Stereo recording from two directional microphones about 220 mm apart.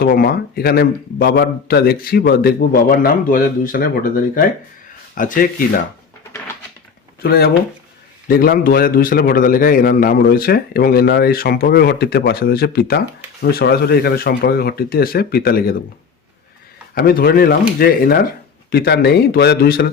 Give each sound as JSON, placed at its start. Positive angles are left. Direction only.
{"t": 0.0, "sound": "a man's voice", "side_deg": 45}
{"t": 7.2, "sound": "a man's voice", "side_deg": 45}
{"t": 16.9, "sound": "a man's voice", "side_deg": 45}